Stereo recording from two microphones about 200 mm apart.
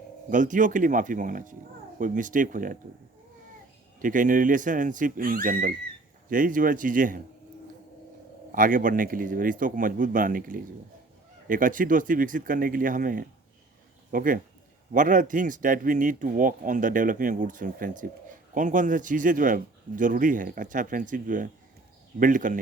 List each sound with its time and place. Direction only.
0.3 s speech: 40° right (ahead or behind)
4.0 s speech: 40° right (ahead or behind)
8.5 s speech: 45° right (ahead or behind)